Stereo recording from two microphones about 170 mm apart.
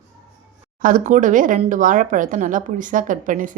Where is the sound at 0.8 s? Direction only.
55° right (ahead or behind).